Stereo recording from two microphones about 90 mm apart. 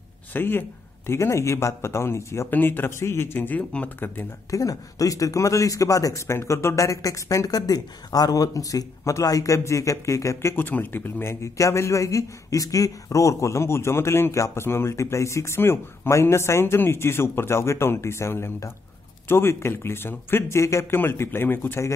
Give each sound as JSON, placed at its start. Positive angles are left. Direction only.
{"t": 0.3, "sound": "a man's voice", "side_deg": 25}
{"t": 4.5, "sound": "speech", "side_deg": 40}
{"t": 10.5, "sound": "a man's voice", "side_deg": 20}